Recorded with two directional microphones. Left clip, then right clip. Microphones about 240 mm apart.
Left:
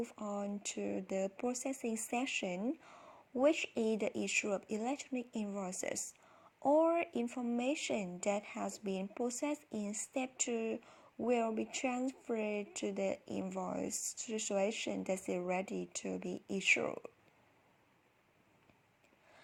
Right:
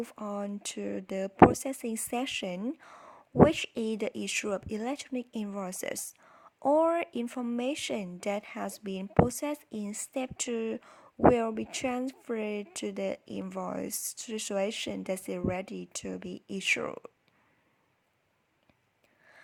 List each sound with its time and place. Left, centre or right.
0.0 s speech: right